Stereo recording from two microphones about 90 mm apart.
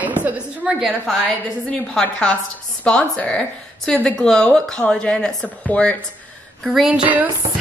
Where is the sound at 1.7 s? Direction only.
10° left (ahead or behind).